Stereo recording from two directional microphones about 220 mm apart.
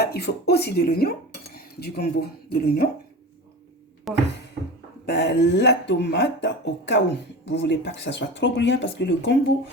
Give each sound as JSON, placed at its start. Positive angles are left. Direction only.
{"t": 0.1, "sound": "speech", "side_deg": 45}
{"t": 4.1, "sound": "speech", "side_deg": 0}
{"t": 5.0, "sound": "speech", "side_deg": 50}